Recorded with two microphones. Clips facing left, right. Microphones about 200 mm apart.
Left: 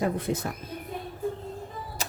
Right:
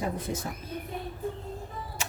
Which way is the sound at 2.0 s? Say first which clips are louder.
Left 2 dB; 40° left (ahead or behind).